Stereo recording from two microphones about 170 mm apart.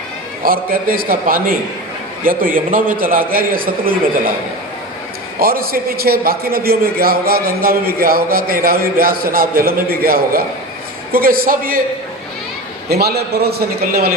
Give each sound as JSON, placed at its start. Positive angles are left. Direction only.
{"t": 0.4, "sound": "a man's voice", "side_deg": -60}
{"t": 5.4, "sound": "a man's voice", "side_deg": -60}
{"t": 12.9, "sound": "a man's voice", "side_deg": -70}